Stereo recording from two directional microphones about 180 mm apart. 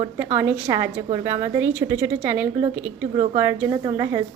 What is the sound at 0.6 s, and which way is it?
A woman's voice, 20° right (ahead or behind).